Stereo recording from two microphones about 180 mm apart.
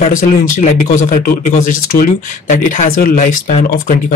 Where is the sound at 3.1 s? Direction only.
35° left (ahead or behind).